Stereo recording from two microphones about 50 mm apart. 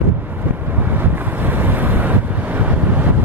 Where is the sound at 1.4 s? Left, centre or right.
Right.